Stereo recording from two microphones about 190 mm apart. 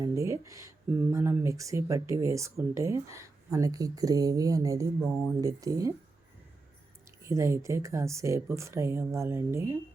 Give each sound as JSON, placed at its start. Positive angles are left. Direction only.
{"t": 0.0, "sound": "speech", "side_deg": -15}
{"t": 7.3, "sound": "speech", "side_deg": -15}